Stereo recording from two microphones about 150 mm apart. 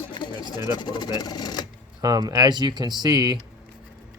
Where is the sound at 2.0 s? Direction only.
25° right (ahead or behind).